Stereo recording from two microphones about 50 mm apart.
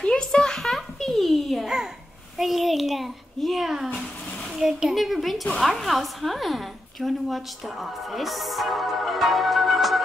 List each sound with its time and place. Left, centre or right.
0.0 s a sound: centre
0.6 s babbling: centre
2.3 s a child's voice: centre